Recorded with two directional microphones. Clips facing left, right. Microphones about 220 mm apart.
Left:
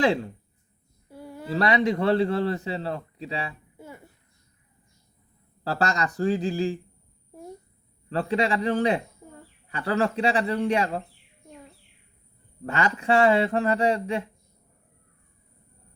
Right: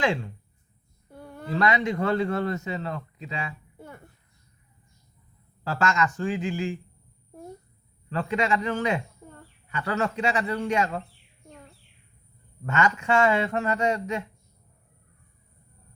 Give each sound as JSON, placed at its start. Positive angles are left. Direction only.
{"t": 0.0, "sound": "a man's voice", "side_deg": 35}
{"t": 1.1, "sound": "a sound", "side_deg": 5}
{"t": 1.5, "sound": "a man's voice", "side_deg": 35}
{"t": 3.8, "sound": "a sound", "side_deg": 5}
{"t": 5.6, "sound": "a man's voice", "side_deg": 35}
{"t": 8.1, "sound": "a man's voice", "side_deg": 35}
{"t": 12.6, "sound": "a man's voice", "side_deg": 35}